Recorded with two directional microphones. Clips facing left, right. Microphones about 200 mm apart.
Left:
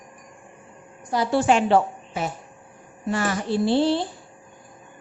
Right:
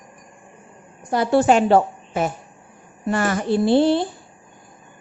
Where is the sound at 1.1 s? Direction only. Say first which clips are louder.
Right 4 dB; 55° right (ahead or behind).